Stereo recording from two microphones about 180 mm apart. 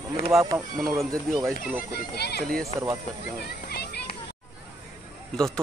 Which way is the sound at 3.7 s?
60° left (ahead or behind).